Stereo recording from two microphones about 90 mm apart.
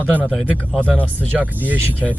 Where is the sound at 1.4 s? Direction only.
20° right (ahead or behind).